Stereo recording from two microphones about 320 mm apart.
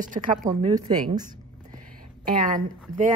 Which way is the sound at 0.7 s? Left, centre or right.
Centre.